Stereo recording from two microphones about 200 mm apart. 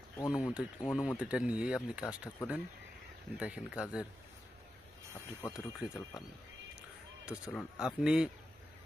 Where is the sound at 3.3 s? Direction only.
5° right (ahead or behind).